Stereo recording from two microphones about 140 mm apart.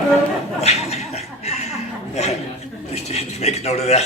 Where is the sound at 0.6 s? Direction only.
50° left (ahead or behind).